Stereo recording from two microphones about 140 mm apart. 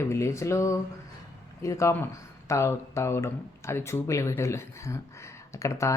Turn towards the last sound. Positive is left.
turn(degrees=20)  # may be behind; listen again after turning